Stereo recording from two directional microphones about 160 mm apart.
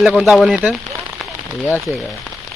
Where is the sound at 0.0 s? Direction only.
5° right (ahead or behind).